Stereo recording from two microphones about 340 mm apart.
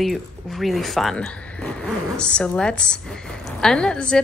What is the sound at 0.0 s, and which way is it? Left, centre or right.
A woman's voice, centre.